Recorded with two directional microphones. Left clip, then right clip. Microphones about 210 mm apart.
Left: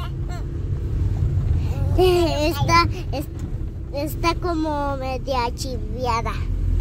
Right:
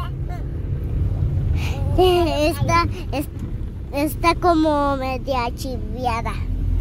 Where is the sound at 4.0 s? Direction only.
40° right (ahead or behind).